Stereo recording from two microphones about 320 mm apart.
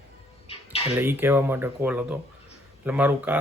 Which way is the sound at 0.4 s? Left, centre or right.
Centre.